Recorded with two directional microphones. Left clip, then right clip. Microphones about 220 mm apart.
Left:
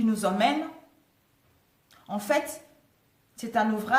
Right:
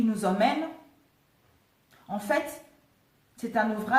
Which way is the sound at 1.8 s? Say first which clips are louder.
Left 1 dB; 40° left (ahead or behind).